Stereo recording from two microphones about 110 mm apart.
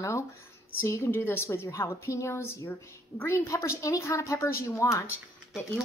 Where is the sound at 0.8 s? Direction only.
25° left (ahead or behind).